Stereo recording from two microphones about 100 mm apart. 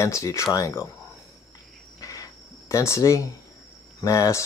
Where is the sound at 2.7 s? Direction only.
30° left (ahead or behind).